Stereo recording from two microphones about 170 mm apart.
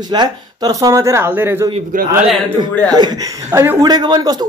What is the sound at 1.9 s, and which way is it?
Speech, 55° right (ahead or behind).